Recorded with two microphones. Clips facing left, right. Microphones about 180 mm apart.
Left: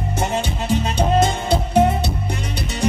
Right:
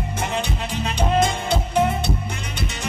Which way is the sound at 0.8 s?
40° left (ahead or behind).